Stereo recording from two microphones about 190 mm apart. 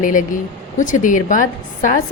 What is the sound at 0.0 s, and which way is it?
A woman's voice, 45° left (ahead or behind).